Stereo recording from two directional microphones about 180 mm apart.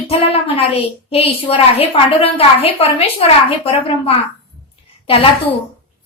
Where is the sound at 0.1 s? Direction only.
30° left (ahead or behind).